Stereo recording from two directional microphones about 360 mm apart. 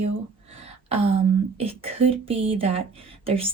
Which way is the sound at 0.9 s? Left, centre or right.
Centre.